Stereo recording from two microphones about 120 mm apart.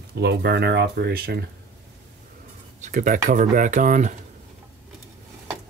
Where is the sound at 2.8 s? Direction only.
90° right.